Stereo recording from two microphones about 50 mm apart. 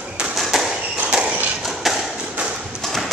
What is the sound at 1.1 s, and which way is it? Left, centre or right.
Tap, centre.